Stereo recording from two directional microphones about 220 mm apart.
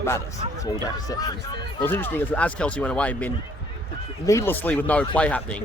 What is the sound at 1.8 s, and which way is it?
Speech, 10° left (ahead or behind).